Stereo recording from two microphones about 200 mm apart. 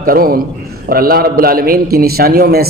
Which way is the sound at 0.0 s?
45° right (ahead or behind).